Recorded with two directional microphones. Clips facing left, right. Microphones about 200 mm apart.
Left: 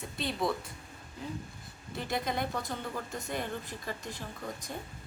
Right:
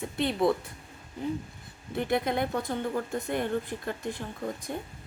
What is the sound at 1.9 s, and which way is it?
Speech, 55° right (ahead or behind).